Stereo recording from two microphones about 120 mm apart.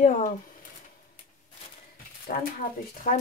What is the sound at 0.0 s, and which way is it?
Speech, 75° left (ahead or behind).